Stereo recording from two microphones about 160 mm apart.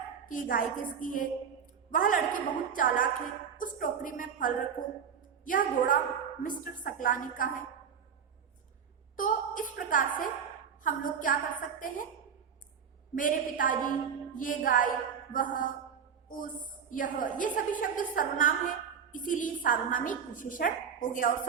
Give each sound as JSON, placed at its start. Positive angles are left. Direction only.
{"t": 0.3, "sound": "a woman's voice", "side_deg": 60}
{"t": 9.1, "sound": "a sound", "side_deg": 55}
{"t": 10.8, "sound": "a woman's voice", "side_deg": 55}
{"t": 13.1, "sound": "a woman's voice", "side_deg": 60}